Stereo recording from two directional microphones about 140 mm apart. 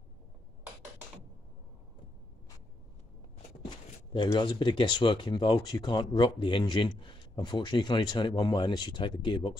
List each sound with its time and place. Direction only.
3.7 s speech: 35° left (ahead or behind)